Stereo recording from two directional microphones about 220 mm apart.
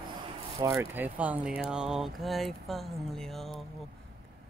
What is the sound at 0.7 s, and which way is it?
Speech, 10° right (ahead or behind).